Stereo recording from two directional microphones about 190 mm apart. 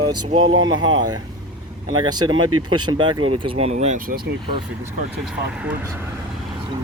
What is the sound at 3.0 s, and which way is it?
Speech, 25° right (ahead or behind).